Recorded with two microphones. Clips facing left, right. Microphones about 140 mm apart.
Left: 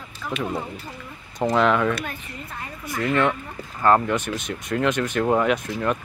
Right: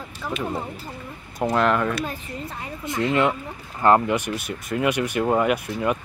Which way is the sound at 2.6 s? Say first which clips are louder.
Right 2 dB; 20° right (ahead or behind).